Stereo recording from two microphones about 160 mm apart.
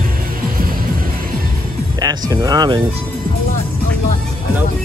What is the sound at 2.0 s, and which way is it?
Music, 25° right (ahead or behind).